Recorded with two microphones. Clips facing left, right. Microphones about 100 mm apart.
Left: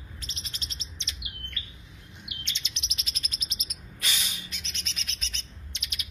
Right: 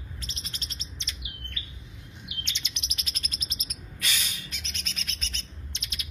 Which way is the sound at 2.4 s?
65° right (ahead or behind).